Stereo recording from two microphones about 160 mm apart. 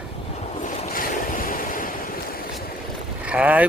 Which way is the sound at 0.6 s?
50° left (ahead or behind).